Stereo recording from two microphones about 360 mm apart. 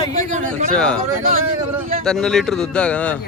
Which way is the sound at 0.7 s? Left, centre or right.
Centre.